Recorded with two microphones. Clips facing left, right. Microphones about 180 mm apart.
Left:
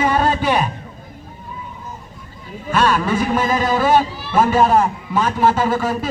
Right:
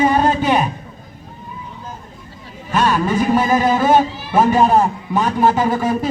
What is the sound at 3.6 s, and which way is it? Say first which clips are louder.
A man's voice: right 2 dB; 20° right (ahead or behind).